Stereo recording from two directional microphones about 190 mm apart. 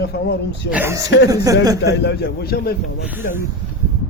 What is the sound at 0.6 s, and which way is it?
Speech, 10° right (ahead or behind).